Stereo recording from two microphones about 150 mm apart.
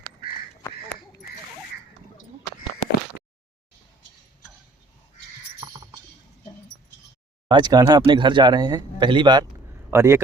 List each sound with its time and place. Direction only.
5.6 s a sound: 35° right (ahead or behind)
7.4 s speech: 30° right (ahead or behind)
9.9 s speech: 15° right (ahead or behind)